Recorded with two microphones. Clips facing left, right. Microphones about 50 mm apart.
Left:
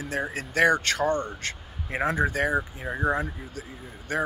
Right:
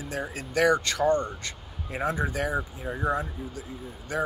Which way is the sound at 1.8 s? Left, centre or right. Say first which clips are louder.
Left 3 dB; left.